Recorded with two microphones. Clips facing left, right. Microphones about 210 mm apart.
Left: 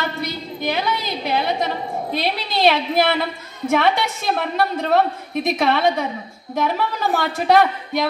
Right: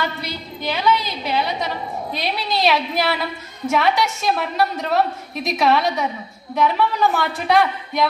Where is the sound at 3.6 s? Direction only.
55° left (ahead or behind).